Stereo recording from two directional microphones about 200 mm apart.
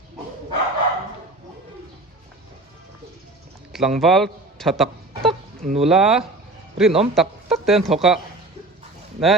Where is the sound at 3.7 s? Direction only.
Centre (ahead or behind).